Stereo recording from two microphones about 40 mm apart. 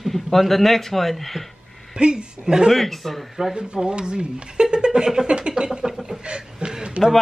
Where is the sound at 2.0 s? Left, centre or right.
Right.